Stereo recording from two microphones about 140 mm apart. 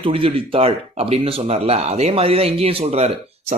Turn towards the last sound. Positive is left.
turn(degrees=-45)  # may be behind; listen again after turning